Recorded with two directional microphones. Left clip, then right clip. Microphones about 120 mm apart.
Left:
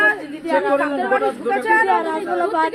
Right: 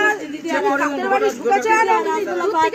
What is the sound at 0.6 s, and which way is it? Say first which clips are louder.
Speech: even; 20° left (ahead or behind).